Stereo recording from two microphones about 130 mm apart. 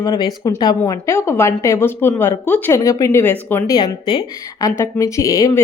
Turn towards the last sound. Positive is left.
turn(degrees=25)  # may be behind; listen again after turning